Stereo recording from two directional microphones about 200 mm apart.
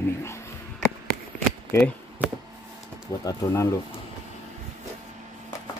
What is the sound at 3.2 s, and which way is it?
Speech, 15° left (ahead or behind).